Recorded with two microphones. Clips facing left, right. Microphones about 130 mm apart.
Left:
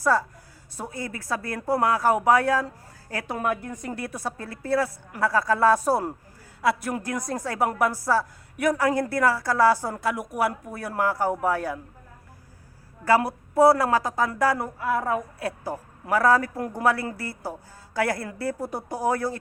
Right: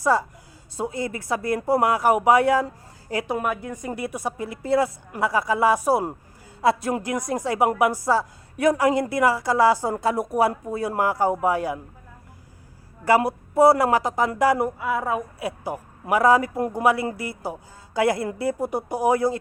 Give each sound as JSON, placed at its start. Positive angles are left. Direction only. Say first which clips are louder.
{"t": 0.0, "sound": "speech", "louder": "right 2 dB", "side_deg": -15}
{"t": 6.6, "sound": "speech", "louder": "right 3 dB", "side_deg": -25}
{"t": 13.1, "sound": "speech", "louder": "right 2 dB", "side_deg": -15}